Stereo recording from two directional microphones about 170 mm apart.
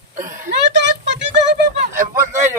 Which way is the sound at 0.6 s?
90° right.